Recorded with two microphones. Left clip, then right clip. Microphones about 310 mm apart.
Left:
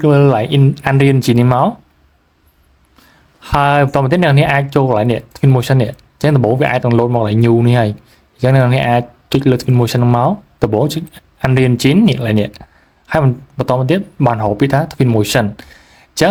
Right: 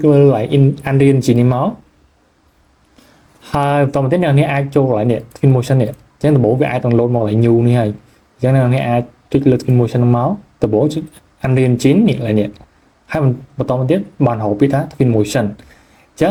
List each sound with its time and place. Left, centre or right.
0.0 s speech: left
3.4 s speech: left